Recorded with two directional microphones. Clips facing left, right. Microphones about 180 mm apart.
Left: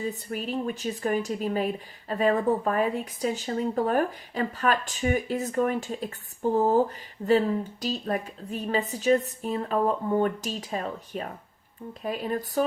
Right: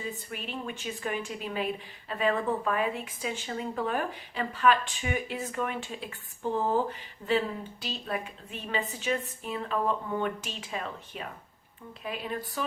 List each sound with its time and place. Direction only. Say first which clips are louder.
0.0 s a woman's voice: left 6 dB; 40° left (ahead or behind)